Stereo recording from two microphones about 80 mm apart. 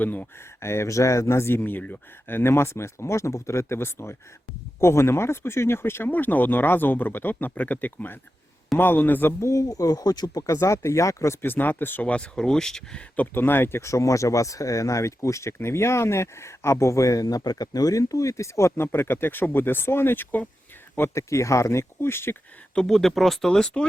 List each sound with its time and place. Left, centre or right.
0.0 s speech: left
0.6 s speech: left
9.4 s speech: left
11.4 s speech: left
12.1 s speech: centre
13.1 s speech: left
20.9 s speech: left
22.7 s speech: centre